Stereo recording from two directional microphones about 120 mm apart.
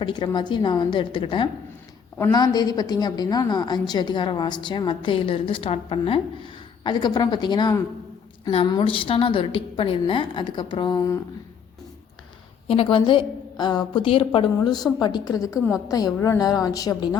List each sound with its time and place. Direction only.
0.0 s a woman's voice: 40° left (ahead or behind)
8.4 s a woman's voice: 50° left (ahead or behind); by 11.2 s 30° left (ahead or behind)
12.6 s a woman's voice: 55° left (ahead or behind)
14.6 s a woman's voice: 35° left (ahead or behind)